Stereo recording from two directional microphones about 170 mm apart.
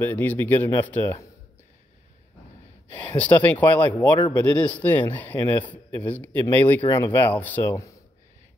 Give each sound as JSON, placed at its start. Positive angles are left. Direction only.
{"t": 0.0, "sound": "a man's voice", "side_deg": 10}
{"t": 2.9, "sound": "a man's voice", "side_deg": 10}
{"t": 4.1, "sound": "a man's voice", "side_deg": 25}
{"t": 4.5, "sound": "a man's voice", "side_deg": 10}